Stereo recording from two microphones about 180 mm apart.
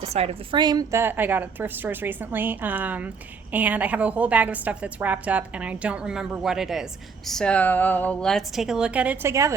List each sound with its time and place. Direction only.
0.0 s a woman's voice: 35° right (ahead or behind)
0.6 s a woman's voice: 20° right (ahead or behind)